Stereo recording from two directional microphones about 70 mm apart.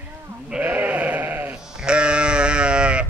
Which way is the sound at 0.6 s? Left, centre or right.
Right.